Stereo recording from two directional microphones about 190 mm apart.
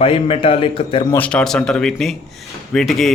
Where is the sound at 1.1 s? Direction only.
5° left (ahead or behind).